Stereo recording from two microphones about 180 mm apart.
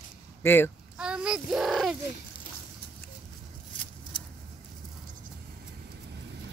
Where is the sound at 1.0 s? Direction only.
5° right (ahead or behind).